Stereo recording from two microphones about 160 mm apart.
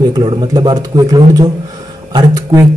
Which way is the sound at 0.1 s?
30° right (ahead or behind).